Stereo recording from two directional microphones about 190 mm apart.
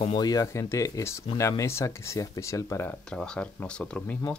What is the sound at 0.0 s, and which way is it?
Speech, 25° left (ahead or behind).